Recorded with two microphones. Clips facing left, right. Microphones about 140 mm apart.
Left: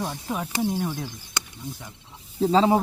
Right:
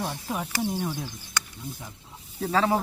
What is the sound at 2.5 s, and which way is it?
Speech, 20° left (ahead or behind).